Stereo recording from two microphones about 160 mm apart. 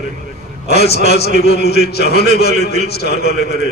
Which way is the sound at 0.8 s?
90° left.